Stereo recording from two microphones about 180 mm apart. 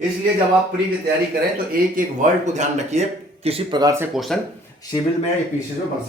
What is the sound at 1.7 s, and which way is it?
Speech, 45° right (ahead or behind).